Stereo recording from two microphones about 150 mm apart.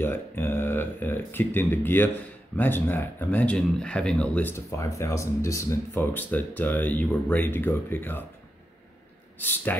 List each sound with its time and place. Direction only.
0.0 s speech: 15° left (ahead or behind)
9.4 s speech: 10° left (ahead or behind)